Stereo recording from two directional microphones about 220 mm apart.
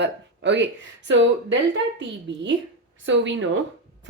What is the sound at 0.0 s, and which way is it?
Speech, 55° right (ahead or behind).